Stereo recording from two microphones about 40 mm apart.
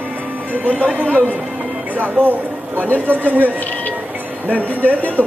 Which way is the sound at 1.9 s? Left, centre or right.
Right.